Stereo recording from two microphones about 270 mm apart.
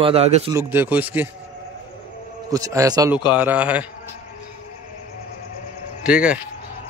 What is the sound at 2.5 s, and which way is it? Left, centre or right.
A man's voice, centre.